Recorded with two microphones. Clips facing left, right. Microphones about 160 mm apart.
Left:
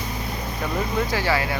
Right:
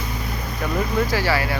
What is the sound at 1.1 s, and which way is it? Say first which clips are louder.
Speech: right 1 dB; 20° left (ahead or behind).